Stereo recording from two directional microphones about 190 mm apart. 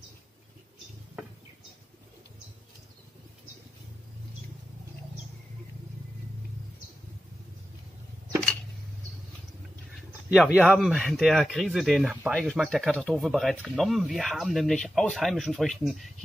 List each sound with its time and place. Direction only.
10.3 s speech: 5° right (ahead or behind)